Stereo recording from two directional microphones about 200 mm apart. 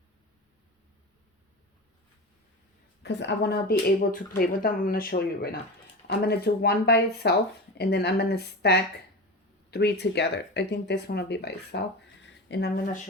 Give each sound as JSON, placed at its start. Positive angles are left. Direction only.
{"t": 3.0, "sound": "speech", "side_deg": 60}